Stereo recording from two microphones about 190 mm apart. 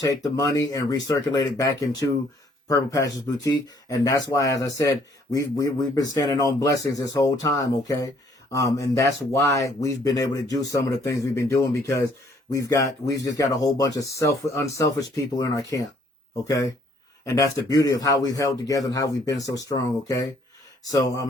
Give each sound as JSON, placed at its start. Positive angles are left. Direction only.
{"t": 0.7, "sound": "speech", "side_deg": 20}